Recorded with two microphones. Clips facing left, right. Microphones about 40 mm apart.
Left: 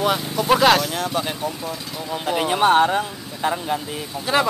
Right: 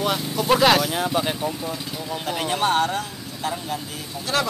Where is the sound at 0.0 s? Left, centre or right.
Centre.